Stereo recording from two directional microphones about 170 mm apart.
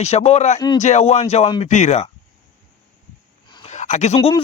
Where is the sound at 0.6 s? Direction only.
20° left (ahead or behind).